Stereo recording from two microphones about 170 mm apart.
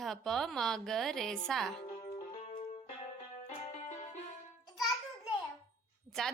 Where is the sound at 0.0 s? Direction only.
Centre (ahead or behind).